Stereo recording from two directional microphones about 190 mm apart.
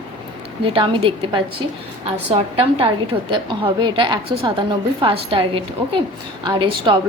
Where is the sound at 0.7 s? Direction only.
25° right (ahead or behind).